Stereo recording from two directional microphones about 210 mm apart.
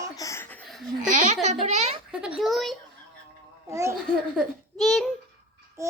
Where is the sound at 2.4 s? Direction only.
Centre (ahead or behind).